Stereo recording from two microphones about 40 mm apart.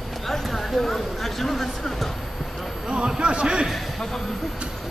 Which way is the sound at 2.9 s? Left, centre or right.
Right.